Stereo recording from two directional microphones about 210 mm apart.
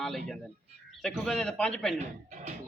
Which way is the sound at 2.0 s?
30° right (ahead or behind).